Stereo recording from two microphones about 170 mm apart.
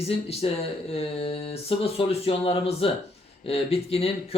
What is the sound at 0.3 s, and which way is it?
Speech, 35° left (ahead or behind).